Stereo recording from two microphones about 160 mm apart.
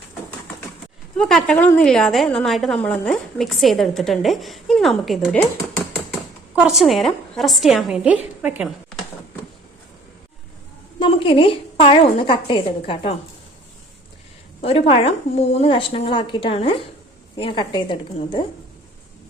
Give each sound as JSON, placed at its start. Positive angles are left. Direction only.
{"t": 1.1, "sound": "a woman's voice", "side_deg": 5}
{"t": 6.6, "sound": "a woman's voice", "side_deg": 0}
{"t": 11.0, "sound": "a woman's voice", "side_deg": 35}
{"t": 14.6, "sound": "a woman's voice", "side_deg": 35}